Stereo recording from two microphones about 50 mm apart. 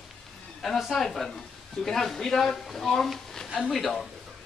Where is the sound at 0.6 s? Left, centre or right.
Centre.